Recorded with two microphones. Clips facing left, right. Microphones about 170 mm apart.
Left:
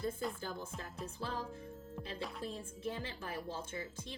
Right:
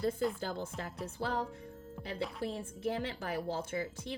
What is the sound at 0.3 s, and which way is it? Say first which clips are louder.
A woman's voice: right 5 dB; 75° right (ahead or behind).